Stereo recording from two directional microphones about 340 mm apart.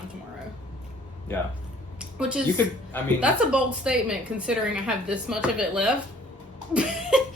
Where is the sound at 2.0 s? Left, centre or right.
Centre.